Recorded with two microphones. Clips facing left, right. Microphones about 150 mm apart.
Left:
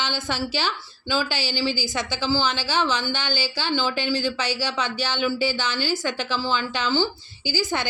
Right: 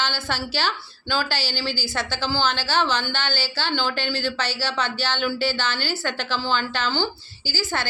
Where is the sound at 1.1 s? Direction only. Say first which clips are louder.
Left 1 dB; 10° left (ahead or behind).